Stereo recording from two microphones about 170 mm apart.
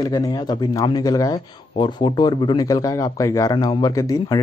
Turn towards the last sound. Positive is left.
turn(degrees=20)  # may be behind; listen again after turning